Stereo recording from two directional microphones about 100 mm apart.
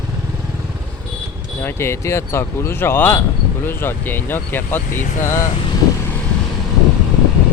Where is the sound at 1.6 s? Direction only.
25° left (ahead or behind).